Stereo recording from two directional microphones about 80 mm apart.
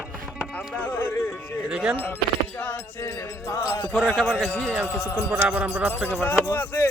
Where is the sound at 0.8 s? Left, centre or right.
Left.